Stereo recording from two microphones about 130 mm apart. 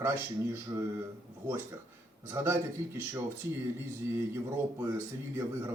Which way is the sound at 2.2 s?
20° right (ahead or behind).